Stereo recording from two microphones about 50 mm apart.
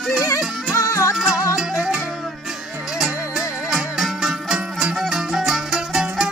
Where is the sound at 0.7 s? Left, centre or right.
Left.